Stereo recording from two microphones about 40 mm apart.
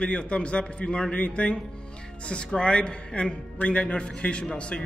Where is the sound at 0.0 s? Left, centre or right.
Left.